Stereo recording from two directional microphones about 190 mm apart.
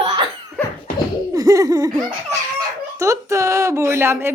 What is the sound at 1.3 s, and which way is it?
Laughter, 15° right (ahead or behind).